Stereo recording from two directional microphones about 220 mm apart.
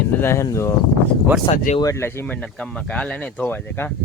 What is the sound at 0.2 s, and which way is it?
Speech, 10° left (ahead or behind).